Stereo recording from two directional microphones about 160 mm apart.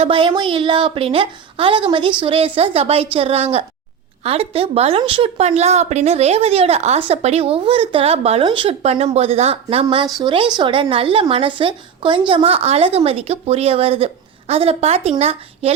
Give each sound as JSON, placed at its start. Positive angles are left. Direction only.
{"t": 0.0, "sound": "speech", "side_deg": -30}